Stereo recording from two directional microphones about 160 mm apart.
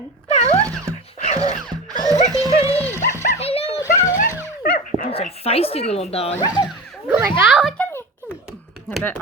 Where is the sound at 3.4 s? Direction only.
40° left (ahead or behind).